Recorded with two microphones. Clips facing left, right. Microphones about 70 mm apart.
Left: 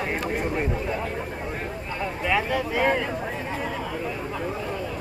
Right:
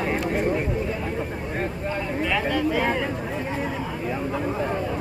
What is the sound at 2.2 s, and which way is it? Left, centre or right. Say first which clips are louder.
Speech: even; centre.